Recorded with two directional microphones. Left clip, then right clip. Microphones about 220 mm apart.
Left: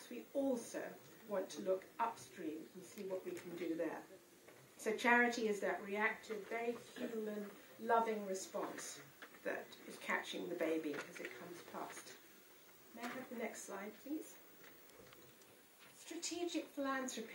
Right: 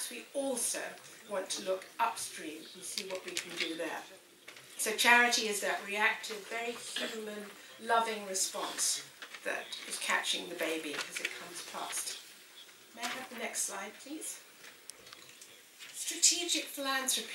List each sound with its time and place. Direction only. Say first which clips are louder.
0.3 s speech: right 3 dB; 30° left (ahead or behind)
0.6 s a woman's voice: right 8 dB; 5° left (ahead or behind)
16.1 s a woman's voice: right 13 dB; 5° left (ahead or behind)